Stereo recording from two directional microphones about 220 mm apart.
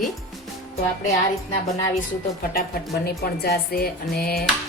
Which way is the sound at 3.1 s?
45° left (ahead or behind).